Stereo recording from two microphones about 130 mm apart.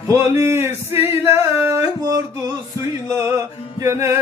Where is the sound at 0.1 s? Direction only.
20° right (ahead or behind).